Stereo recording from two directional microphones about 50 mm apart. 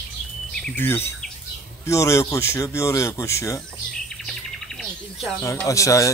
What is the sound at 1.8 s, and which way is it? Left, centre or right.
Speech, left.